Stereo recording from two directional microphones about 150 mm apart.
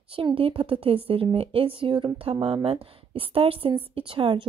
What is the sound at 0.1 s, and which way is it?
A woman's voice, 35° right (ahead or behind).